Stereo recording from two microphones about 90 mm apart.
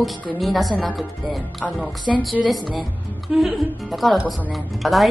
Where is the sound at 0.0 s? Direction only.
Centre (ahead or behind).